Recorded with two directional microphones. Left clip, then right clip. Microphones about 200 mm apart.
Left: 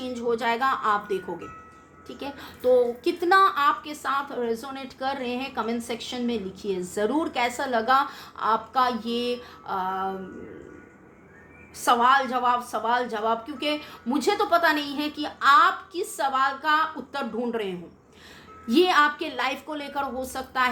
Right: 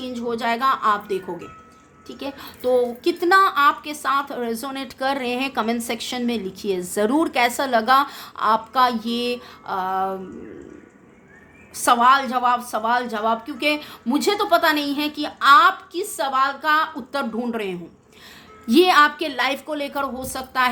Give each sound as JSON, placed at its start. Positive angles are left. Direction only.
{"t": 0.0, "sound": "a woman's voice", "side_deg": -15}
{"t": 11.8, "sound": "a woman's voice", "side_deg": -30}